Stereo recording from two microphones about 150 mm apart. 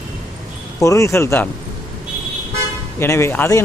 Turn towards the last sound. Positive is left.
turn(degrees=15)  # may be behind; listen again after turning